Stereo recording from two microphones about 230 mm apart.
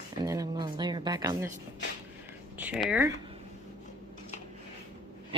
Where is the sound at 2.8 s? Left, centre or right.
Centre.